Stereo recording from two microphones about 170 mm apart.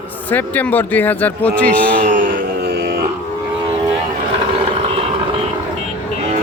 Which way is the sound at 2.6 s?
75° right (ahead or behind).